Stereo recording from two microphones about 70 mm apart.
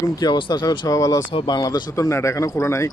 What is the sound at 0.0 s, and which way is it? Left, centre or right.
Speech, left.